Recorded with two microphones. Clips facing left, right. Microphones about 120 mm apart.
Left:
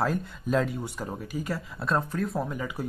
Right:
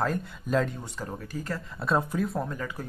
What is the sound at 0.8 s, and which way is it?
Speech, 10° left (ahead or behind).